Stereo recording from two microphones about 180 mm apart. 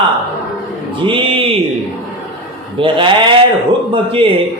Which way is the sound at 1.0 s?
30° right (ahead or behind).